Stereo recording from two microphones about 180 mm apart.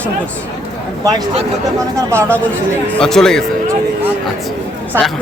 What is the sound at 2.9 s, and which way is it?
Speech, 5° left (ahead or behind).